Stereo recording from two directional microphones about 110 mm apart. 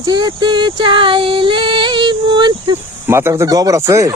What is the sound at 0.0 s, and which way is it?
Female singing, 40° right (ahead or behind).